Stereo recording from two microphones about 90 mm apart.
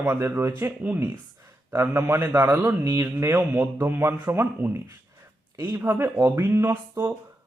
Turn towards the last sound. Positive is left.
turn(degrees=-25)  # may be behind; listen again after turning